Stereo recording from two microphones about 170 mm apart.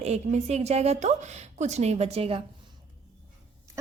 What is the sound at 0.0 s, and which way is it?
A woman's voice, 40° right (ahead or behind).